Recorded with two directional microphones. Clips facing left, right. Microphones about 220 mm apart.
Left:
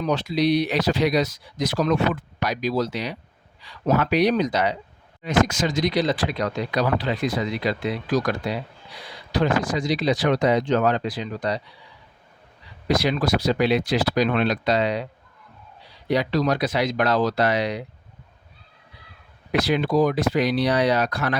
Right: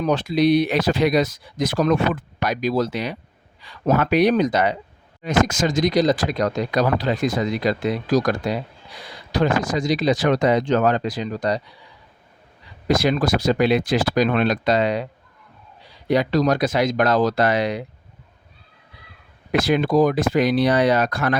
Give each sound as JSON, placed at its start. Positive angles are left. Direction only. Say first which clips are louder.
{"t": 0.0, "sound": "speech", "louder": "right 3 dB", "side_deg": -50}
{"t": 12.9, "sound": "speech", "louder": "right 2 dB", "side_deg": -50}
{"t": 16.0, "sound": "speech", "louder": "right 3 dB", "side_deg": -50}
{"t": 19.5, "sound": "speech", "louder": "right 3 dB", "side_deg": -50}